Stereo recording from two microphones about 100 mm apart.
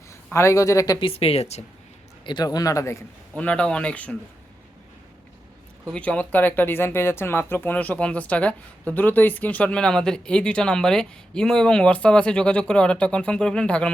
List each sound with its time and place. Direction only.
0.3 s speech: 30° left (ahead or behind)
0.9 s speech: 70° left (ahead or behind); by 1.6 s 90° left
2.2 s speech: 45° left (ahead or behind)
3.3 s speech: 15° left (ahead or behind)
5.9 s speech: 15° left (ahead or behind)